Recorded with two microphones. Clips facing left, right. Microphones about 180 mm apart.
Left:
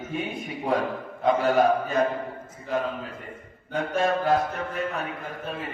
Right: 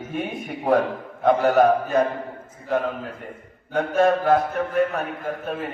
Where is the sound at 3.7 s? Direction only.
60° right (ahead or behind).